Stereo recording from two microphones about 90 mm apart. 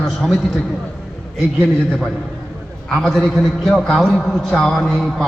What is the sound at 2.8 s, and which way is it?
A man's voice, 5° left (ahead or behind).